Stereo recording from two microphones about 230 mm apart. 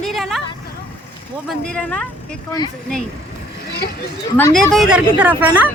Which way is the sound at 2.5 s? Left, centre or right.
Centre.